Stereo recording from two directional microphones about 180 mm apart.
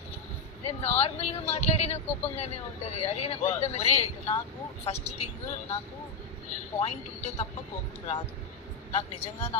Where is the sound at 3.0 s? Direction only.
35° left (ahead or behind).